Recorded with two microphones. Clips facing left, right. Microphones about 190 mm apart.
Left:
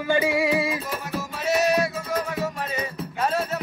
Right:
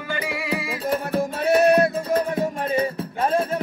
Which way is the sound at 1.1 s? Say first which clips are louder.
Right 4 dB; 55° right (ahead or behind).